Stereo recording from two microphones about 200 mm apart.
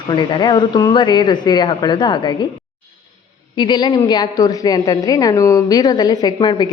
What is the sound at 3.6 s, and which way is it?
A man's voice, 25° left (ahead or behind).